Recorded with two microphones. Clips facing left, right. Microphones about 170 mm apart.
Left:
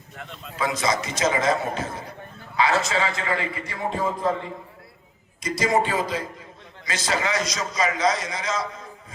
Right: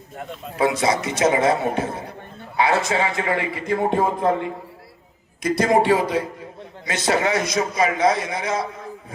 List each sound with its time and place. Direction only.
0.5 s a man's voice: 65° right (ahead or behind)
5.4 s a man's voice: 60° right (ahead or behind)